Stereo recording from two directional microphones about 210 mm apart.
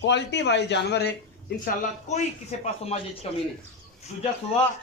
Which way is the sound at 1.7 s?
35° left (ahead or behind).